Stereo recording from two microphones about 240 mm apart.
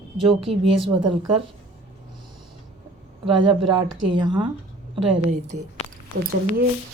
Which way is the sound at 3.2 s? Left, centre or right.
Centre.